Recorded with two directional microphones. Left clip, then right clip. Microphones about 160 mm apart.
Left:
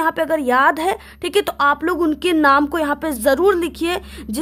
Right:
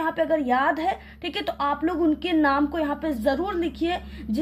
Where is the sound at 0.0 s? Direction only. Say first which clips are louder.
Left 5 dB; 65° left (ahead or behind).